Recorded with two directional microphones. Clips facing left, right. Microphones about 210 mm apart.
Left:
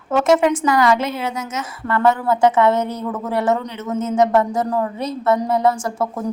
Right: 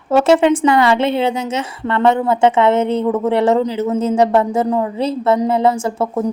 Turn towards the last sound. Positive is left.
turn(degrees=-25)  # may be behind; listen again after turning